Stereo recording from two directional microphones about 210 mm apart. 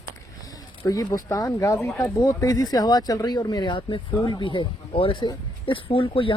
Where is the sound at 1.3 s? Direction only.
15° left (ahead or behind).